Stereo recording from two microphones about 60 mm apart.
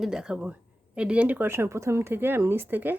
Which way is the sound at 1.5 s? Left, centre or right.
Right.